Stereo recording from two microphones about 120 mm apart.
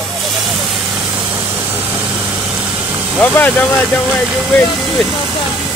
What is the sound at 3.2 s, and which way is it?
Speech, 15° left (ahead or behind).